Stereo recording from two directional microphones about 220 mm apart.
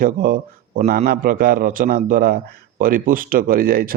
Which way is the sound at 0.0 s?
40° right (ahead or behind).